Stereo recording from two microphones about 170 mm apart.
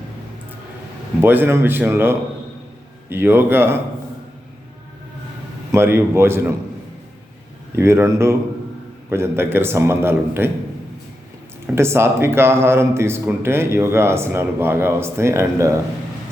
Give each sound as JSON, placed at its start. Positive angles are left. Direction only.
{"t": 1.2, "sound": "a man's voice", "side_deg": -10}
{"t": 5.7, "sound": "a man's voice", "side_deg": -15}
{"t": 7.8, "sound": "a man's voice", "side_deg": -15}
{"t": 11.6, "sound": "a man's voice", "side_deg": -15}